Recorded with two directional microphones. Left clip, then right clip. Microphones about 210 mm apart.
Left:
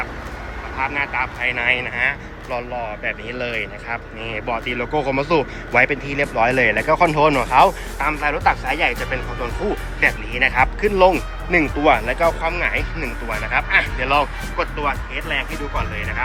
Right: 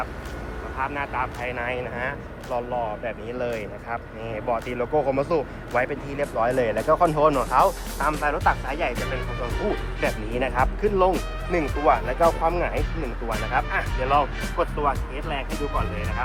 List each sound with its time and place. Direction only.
0.8 s speech: 5° right (ahead or behind)
10.0 s speech: 10° right (ahead or behind)
12.4 s speech: 15° right (ahead or behind)